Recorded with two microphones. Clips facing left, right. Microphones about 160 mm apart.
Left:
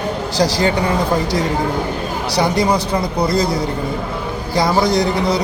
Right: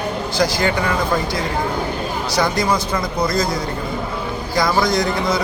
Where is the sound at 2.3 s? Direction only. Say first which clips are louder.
Left 3 dB; 30° left (ahead or behind).